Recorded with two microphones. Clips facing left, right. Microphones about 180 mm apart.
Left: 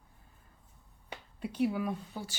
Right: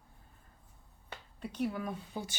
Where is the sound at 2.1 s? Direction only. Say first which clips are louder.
Right 1 dB; 15° right (ahead or behind).